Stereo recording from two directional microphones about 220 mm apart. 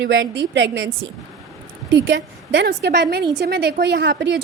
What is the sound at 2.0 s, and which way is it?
A woman's voice, 55° right (ahead or behind).